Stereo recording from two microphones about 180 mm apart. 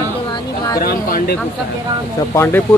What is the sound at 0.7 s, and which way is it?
Speech, 55° left (ahead or behind).